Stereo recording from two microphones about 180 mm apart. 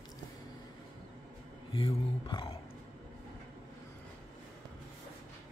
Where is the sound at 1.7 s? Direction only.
25° left (ahead or behind).